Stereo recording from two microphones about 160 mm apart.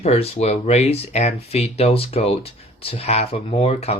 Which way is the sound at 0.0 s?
40° left (ahead or behind).